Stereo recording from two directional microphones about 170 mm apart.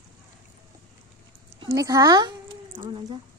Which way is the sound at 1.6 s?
20° right (ahead or behind).